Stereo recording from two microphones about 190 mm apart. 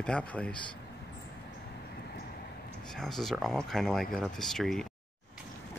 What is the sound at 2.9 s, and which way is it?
Speech, centre (ahead or behind).